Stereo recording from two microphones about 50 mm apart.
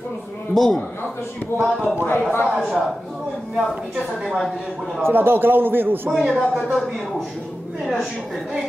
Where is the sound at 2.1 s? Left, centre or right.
Left.